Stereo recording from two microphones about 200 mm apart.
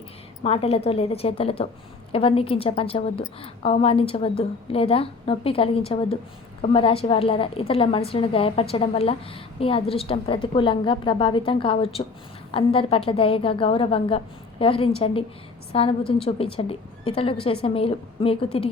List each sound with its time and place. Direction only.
0.4 s a woman's voice: 30° left (ahead or behind)